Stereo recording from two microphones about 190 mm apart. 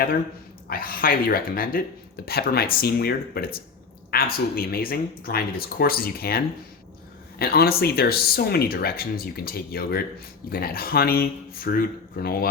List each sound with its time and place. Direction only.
0.7 s speech: 50° left (ahead or behind)